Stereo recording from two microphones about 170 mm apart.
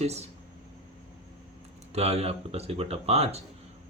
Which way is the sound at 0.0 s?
40° right (ahead or behind).